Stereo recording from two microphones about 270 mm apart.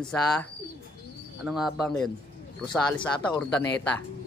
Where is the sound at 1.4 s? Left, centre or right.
Centre.